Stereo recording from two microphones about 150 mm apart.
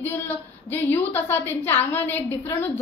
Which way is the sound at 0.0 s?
15° left (ahead or behind).